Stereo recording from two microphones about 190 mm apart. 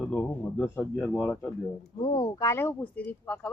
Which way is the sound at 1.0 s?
Centre (ahead or behind).